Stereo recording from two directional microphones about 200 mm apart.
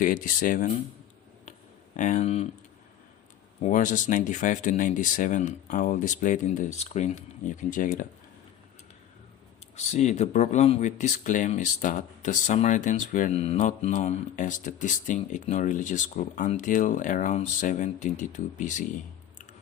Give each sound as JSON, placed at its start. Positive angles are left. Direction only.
{"t": 0.0, "sound": "speech", "side_deg": 45}
{"t": 2.0, "sound": "speech", "side_deg": 40}
{"t": 3.6, "sound": "speech", "side_deg": 40}
{"t": 9.7, "sound": "speech", "side_deg": 35}